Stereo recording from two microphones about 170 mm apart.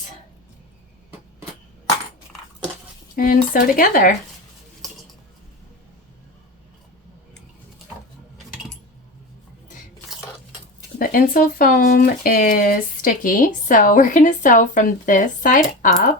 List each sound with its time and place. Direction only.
3.2 s speech: 55° left (ahead or behind)
10.9 s speech: 60° left (ahead or behind)